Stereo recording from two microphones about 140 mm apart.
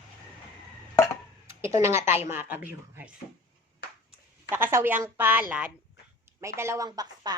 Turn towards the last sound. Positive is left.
turn(degrees=-30)  # may be behind; listen again after turning